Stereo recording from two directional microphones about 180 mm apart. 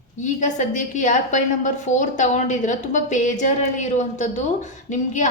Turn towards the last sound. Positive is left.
turn(degrees=40)  # may be behind; listen again after turning